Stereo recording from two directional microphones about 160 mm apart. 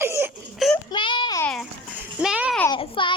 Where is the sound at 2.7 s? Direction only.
35° left (ahead or behind).